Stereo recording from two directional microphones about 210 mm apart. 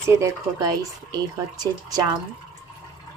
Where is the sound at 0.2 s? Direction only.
15° right (ahead or behind).